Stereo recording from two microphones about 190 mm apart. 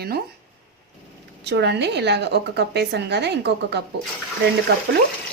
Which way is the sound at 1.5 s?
65° right (ahead or behind).